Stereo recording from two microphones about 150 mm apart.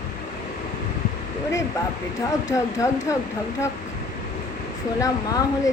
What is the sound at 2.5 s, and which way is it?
Speech, 20° left (ahead or behind).